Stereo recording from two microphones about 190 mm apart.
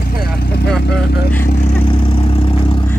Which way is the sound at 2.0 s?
30° left (ahead or behind).